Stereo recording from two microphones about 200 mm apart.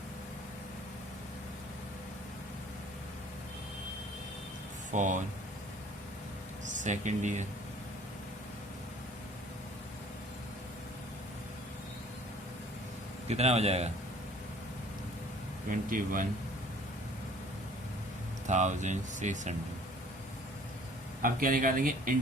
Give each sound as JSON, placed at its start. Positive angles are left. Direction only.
{"t": 4.9, "sound": "speech", "side_deg": -40}
{"t": 6.7, "sound": "speech", "side_deg": -40}
{"t": 13.2, "sound": "speech", "side_deg": -30}
{"t": 15.7, "sound": "speech", "side_deg": -40}
{"t": 18.4, "sound": "speech", "side_deg": -35}
{"t": 21.2, "sound": "speech", "side_deg": -45}